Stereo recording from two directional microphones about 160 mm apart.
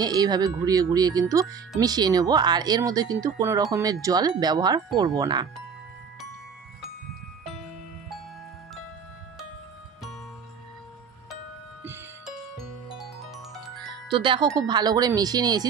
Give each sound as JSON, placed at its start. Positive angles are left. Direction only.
{"t": 0.0, "sound": "speech", "side_deg": -25}
{"t": 12.3, "sound": "music", "side_deg": 0}
{"t": 14.0, "sound": "chime", "side_deg": -30}
{"t": 14.7, "sound": "speech", "side_deg": -25}